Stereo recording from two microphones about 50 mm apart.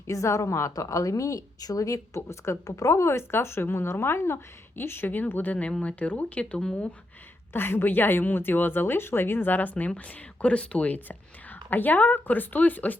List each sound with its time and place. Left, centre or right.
0.1 s a woman's voice: left
5.8 s speech: left
7.5 s a woman's voice: left
10.4 s speech: left